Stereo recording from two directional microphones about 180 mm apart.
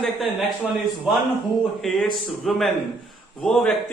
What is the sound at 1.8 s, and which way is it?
A man's voice, centre (ahead or behind).